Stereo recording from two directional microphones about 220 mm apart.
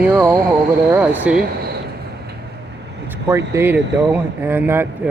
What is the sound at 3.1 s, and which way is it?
Speech, 15° right (ahead or behind).